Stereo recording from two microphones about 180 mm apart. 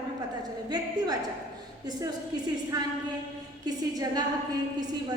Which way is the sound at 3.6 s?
20° right (ahead or behind).